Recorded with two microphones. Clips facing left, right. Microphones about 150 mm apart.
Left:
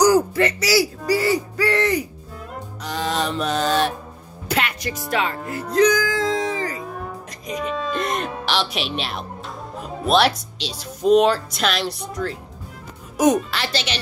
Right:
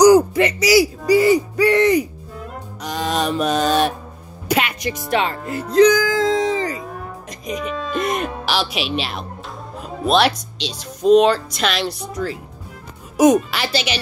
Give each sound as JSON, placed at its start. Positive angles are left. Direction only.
{"t": 0.0, "sound": "speech", "side_deg": -15}
{"t": 2.8, "sound": "music", "side_deg": -15}
{"t": 4.5, "sound": "speech", "side_deg": -15}
{"t": 7.7, "sound": "hoot", "side_deg": -5}
{"t": 8.3, "sound": "speech", "side_deg": 0}
{"t": 13.2, "sound": "music", "side_deg": -10}